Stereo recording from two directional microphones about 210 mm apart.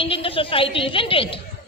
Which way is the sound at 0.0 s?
25° left (ahead or behind).